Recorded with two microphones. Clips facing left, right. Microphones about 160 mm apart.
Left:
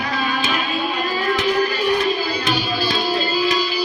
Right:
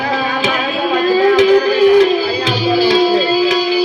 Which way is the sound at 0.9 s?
90° right.